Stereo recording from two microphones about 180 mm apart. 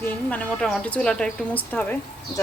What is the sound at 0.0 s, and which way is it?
Speech, 10° left (ahead or behind).